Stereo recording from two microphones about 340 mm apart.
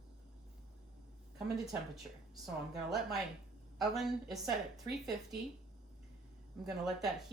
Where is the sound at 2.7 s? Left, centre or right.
Centre.